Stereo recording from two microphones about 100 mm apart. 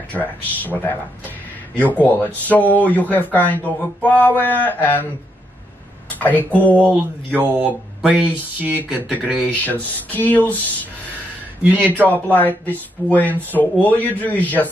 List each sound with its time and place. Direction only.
0.1 s speech: 15° left (ahead or behind)
6.0 s speech: 15° left (ahead or behind)
7.2 s speech: 20° right (ahead or behind)
9.7 s speech: 15° left (ahead or behind)
11.9 s speech: 15° left (ahead or behind)